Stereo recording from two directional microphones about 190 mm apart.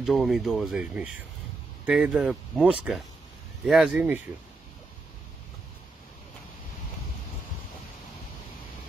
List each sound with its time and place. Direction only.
0.0 s speech: centre (ahead or behind)